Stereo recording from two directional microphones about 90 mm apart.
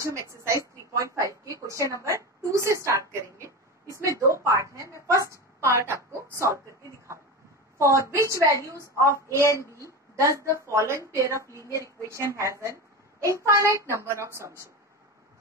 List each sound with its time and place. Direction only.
0.0 s a woman's voice: 35° right (ahead or behind)
7.8 s a child's voice: 35° right (ahead or behind)
9.5 s a woman's voice: 35° left (ahead or behind)
9.8 s a sound: 35° right (ahead or behind)
10.7 s a child's voice: 35° right (ahead or behind)